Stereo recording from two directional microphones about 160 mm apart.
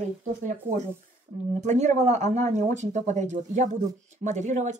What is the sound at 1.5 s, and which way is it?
Speech, 45° right (ahead or behind).